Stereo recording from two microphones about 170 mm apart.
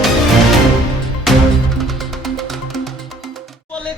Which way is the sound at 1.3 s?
Centre (ahead or behind).